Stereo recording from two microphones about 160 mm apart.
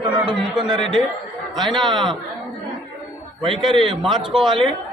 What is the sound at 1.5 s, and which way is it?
Speech, centre (ahead or behind).